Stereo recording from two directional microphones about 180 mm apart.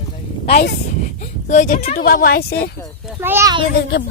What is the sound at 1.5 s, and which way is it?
Speech, 45° left (ahead or behind).